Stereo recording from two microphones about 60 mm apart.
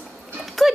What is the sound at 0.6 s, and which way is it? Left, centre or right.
Gears, centre.